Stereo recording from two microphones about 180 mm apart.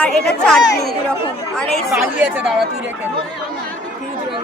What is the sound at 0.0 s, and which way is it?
Speech, 5° left (ahead or behind).